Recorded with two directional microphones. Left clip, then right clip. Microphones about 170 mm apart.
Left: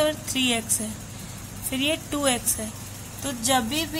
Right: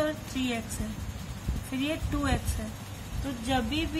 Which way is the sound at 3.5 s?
50° left (ahead or behind).